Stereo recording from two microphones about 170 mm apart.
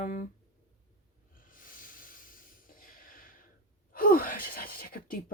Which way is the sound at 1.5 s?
55° left (ahead or behind).